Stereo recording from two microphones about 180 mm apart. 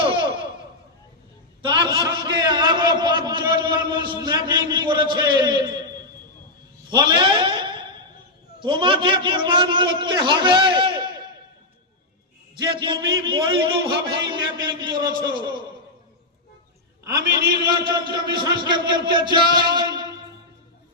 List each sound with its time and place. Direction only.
0.0 s a sound: 25° right (ahead or behind)
1.6 s a man's voice: 25° right (ahead or behind)
6.9 s a sound: 25° right (ahead or behind)
8.5 s a man's voice: 25° right (ahead or behind)
12.5 s a man's voice: 25° right (ahead or behind)
17.1 s a man's voice: 20° right (ahead or behind)